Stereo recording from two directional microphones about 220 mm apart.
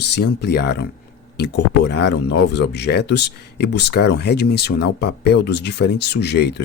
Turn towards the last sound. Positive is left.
turn(degrees=50)  # may be behind; listen again after turning